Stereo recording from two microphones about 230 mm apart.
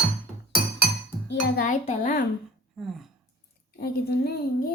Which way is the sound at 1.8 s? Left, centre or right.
Left.